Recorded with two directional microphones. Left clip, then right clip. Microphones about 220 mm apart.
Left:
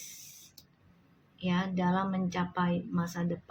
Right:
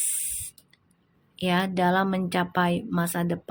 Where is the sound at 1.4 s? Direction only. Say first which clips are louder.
Right 9 dB; 50° right (ahead or behind).